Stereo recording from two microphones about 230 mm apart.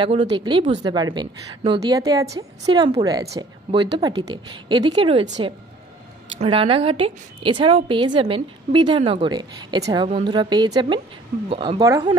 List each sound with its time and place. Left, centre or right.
0.0 s a woman's voice: right
6.4 s a woman's voice: right